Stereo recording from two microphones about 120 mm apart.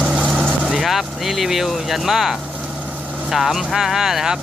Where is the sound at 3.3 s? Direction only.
Centre (ahead or behind).